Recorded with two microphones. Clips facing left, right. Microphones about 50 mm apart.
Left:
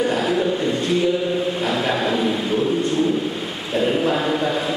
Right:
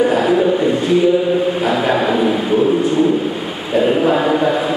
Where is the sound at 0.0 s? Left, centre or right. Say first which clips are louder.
Right 6 dB; centre.